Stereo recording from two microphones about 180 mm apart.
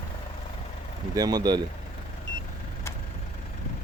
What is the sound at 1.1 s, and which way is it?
Speech, 20° right (ahead or behind).